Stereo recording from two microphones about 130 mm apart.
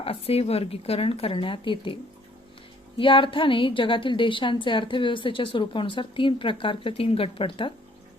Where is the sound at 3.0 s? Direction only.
40° left (ahead or behind).